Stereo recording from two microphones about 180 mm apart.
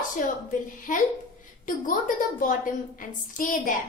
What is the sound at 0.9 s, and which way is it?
A woman's voice, 50° left (ahead or behind).